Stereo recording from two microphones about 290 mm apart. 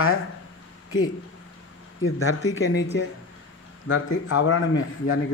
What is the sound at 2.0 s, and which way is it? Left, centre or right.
A man's voice, left.